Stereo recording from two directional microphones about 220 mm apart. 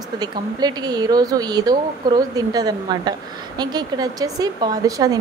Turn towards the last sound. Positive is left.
turn(degrees=-15)  # may be behind; listen again after turning